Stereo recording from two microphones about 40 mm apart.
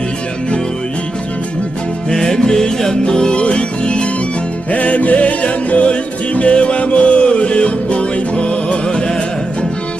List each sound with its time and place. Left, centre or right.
2.0 s music: centre